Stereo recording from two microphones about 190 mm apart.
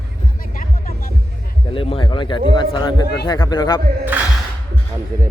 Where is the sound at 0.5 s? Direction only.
45° left (ahead or behind).